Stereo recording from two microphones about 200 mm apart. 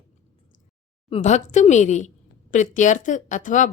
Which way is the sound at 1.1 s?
35° left (ahead or behind).